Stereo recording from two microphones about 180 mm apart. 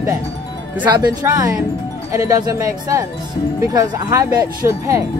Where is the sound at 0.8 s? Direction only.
20° right (ahead or behind).